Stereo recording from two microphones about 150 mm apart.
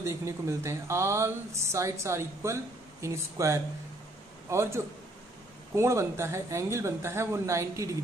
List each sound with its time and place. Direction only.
0.0 s a man's voice: 20° right (ahead or behind)